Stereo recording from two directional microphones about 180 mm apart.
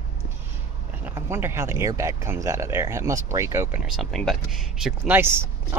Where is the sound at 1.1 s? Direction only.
15° right (ahead or behind).